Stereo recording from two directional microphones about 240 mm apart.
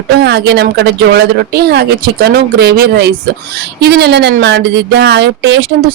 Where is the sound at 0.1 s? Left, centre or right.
Right.